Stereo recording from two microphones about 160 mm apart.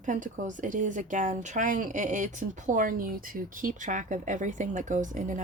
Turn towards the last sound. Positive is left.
turn(degrees=-50)  # may be behind; listen again after turning